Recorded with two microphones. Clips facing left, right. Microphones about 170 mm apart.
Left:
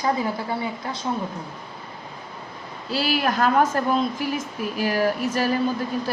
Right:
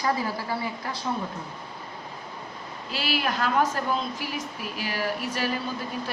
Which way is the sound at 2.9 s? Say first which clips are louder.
Left 5 dB; 40° left (ahead or behind).